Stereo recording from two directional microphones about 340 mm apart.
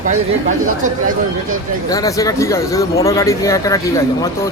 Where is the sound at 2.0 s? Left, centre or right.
Centre.